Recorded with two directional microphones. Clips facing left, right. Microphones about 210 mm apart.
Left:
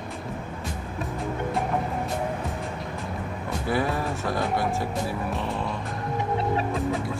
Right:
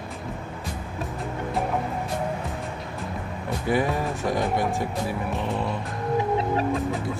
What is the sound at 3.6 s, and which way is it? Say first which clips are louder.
Music: right 2 dB; 15° right (ahead or behind).